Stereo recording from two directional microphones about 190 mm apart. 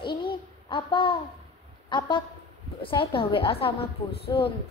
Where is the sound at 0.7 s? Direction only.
25° left (ahead or behind).